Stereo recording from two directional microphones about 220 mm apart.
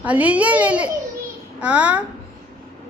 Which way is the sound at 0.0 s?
5° right (ahead or behind).